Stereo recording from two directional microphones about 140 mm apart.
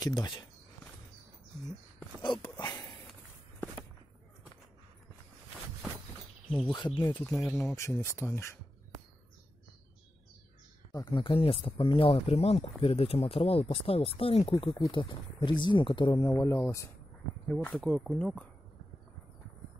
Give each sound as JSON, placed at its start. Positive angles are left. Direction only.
{"t": 0.0, "sound": "speech", "side_deg": 30}
{"t": 2.2, "sound": "speech", "side_deg": 35}
{"t": 6.7, "sound": "speech", "side_deg": 30}
{"t": 7.3, "sound": "speech", "side_deg": 15}
{"t": 10.9, "sound": "speech", "side_deg": 35}
{"t": 16.3, "sound": "speech", "side_deg": 20}
{"t": 17.5, "sound": "speech", "side_deg": 5}